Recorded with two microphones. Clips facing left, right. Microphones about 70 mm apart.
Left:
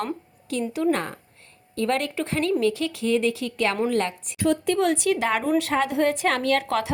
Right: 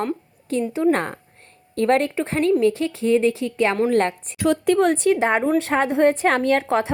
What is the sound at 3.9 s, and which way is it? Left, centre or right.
Speech, right.